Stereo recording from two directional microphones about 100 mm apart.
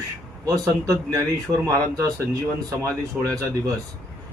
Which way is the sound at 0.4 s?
35° right (ahead or behind).